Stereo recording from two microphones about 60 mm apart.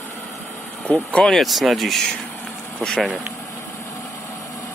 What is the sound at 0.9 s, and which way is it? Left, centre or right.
Speech, centre.